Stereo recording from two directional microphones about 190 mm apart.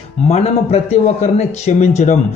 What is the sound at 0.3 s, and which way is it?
Speech, 35° left (ahead or behind).